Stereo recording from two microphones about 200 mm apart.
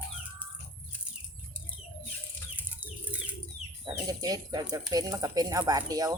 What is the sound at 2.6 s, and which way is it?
Chicken, 10° right (ahead or behind).